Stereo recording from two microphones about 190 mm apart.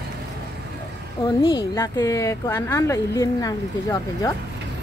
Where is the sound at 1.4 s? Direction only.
20° left (ahead or behind).